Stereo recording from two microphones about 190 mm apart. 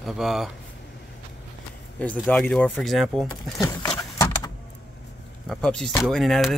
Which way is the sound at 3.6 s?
15° left (ahead or behind).